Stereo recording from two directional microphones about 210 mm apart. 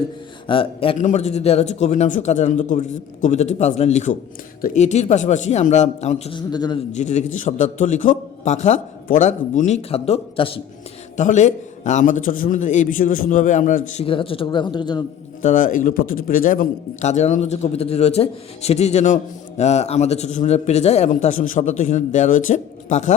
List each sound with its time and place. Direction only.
0.4 s a man's voice: 25° left (ahead or behind)
6.9 s a man's voice: 35° left (ahead or behind)
15.4 s a man's voice: 35° left (ahead or behind)